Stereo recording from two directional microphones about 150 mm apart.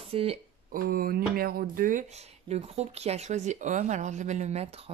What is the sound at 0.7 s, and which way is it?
Speech, 75° right (ahead or behind).